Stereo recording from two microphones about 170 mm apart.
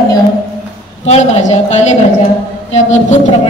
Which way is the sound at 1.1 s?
40° left (ahead or behind).